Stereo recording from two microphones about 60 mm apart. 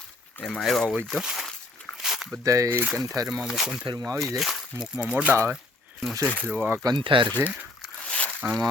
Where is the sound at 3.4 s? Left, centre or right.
Centre.